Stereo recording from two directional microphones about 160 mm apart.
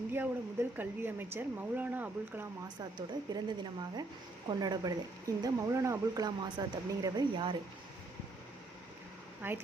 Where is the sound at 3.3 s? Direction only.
25° right (ahead or behind).